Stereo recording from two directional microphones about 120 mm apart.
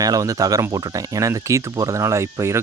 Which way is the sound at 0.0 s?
30° right (ahead or behind).